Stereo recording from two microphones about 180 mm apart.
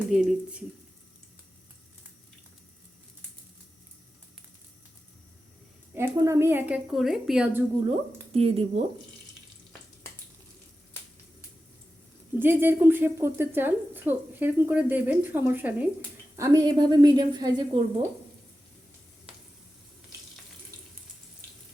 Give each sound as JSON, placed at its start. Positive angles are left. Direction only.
{"t": 0.1, "sound": "speech", "side_deg": -5}
{"t": 5.9, "sound": "a woman's voice", "side_deg": -15}
{"t": 7.9, "sound": "speech", "side_deg": -35}
{"t": 12.4, "sound": "a woman's voice", "side_deg": -10}
{"t": 16.3, "sound": "a woman's voice", "side_deg": -20}